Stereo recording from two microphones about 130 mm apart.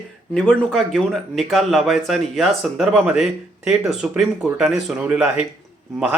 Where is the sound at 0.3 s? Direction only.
Centre (ahead or behind).